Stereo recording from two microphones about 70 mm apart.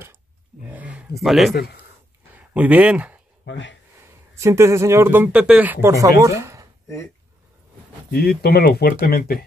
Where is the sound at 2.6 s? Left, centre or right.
Centre.